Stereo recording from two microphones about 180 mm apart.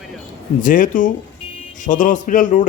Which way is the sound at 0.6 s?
45° left (ahead or behind).